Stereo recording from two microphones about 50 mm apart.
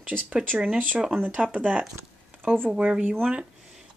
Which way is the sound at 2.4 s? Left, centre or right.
Right.